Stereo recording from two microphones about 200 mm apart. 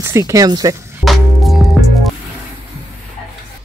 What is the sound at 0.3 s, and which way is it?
Speech, 20° right (ahead or behind).